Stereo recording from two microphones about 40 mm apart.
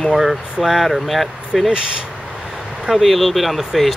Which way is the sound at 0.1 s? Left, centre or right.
Centre.